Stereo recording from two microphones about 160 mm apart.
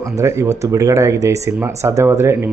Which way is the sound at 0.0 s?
20° right (ahead or behind).